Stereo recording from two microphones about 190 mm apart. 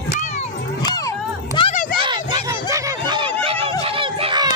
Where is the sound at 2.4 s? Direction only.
15° right (ahead or behind).